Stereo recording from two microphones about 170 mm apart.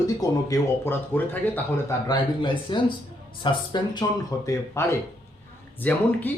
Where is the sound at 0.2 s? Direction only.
20° left (ahead or behind).